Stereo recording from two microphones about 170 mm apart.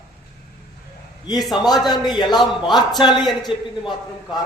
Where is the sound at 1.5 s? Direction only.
25° left (ahead or behind).